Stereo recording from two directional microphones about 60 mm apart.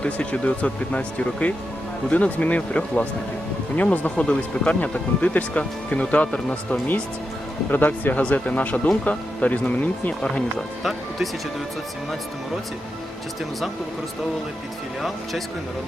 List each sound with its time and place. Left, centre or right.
0.0 s speech: centre
7.7 s speech: left